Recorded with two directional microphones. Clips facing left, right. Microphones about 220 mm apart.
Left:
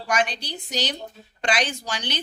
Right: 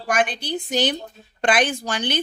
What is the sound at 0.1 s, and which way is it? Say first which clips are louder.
A woman's voice: right 3 dB; 50° right (ahead or behind).